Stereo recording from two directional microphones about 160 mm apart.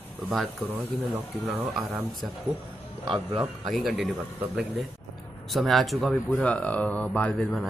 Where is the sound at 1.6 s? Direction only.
Centre (ahead or behind).